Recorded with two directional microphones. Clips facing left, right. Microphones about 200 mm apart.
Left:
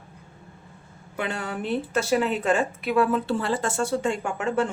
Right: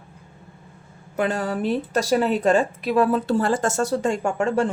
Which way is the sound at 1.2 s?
40° right (ahead or behind).